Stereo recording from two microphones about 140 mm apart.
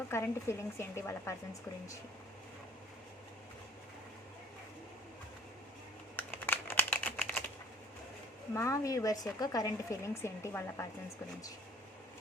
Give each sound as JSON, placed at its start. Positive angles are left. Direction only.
{"t": 0.1, "sound": "speech", "side_deg": 20}
{"t": 6.1, "sound": "typing", "side_deg": 15}
{"t": 8.5, "sound": "speech", "side_deg": 20}